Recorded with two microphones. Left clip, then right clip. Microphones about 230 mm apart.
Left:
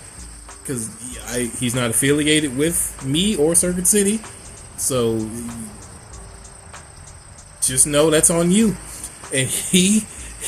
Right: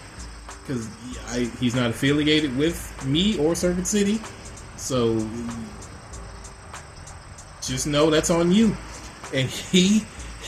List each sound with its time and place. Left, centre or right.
0.7 s speech: left
7.7 s speech: left